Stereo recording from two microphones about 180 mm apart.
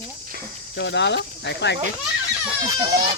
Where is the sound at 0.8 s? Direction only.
75° left (ahead or behind).